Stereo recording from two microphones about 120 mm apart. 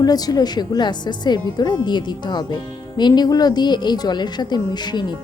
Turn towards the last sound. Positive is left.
turn(degrees=40)  # may be behind; listen again after turning